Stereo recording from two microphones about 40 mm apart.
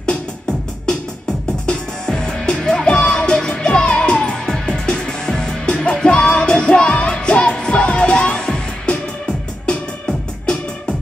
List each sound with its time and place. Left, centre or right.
0.0 s music: left
4.5 s music: centre